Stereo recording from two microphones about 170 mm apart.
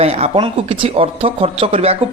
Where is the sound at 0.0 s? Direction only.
40° right (ahead or behind).